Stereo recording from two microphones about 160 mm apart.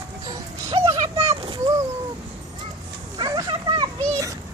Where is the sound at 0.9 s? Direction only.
20° right (ahead or behind).